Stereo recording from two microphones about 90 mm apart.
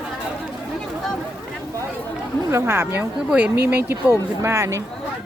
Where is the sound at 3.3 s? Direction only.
15° right (ahead or behind); by 4.8 s 35° right (ahead or behind).